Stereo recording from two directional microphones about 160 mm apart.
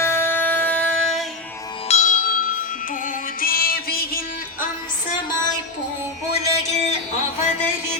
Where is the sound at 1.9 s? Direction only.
50° left (ahead or behind); by 4.2 s 65° left (ahead or behind).